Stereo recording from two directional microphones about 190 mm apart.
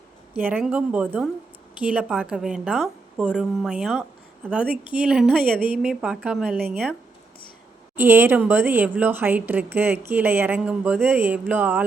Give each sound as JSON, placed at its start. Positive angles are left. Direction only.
{"t": 0.3, "sound": "a woman's voice", "side_deg": -10}
{"t": 7.9, "sound": "a woman's voice", "side_deg": -10}